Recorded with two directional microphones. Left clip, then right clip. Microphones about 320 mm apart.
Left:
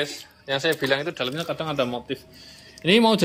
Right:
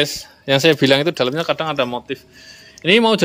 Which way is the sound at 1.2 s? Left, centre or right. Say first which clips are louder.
Right 9 dB; centre.